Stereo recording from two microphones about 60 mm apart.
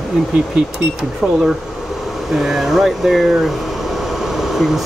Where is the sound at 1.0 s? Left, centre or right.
Centre.